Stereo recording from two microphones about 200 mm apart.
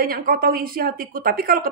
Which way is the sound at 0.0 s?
45° right (ahead or behind).